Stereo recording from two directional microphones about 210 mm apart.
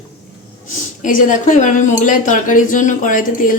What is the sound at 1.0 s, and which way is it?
Speech, 40° left (ahead or behind).